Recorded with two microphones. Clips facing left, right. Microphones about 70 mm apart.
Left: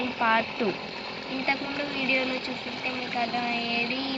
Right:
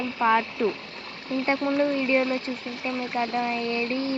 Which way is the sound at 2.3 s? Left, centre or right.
Left.